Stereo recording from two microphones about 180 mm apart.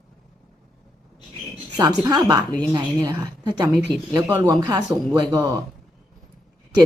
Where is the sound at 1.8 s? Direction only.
20° right (ahead or behind).